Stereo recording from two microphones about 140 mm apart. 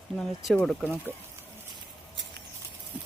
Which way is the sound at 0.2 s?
5° left (ahead or behind).